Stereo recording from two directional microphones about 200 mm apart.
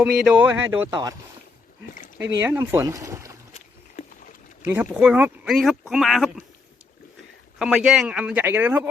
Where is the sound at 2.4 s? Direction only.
10° right (ahead or behind).